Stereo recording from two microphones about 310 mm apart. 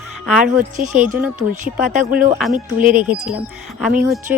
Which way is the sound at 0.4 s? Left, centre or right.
Right.